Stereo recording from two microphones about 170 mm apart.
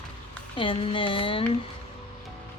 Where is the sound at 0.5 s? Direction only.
30° left (ahead or behind).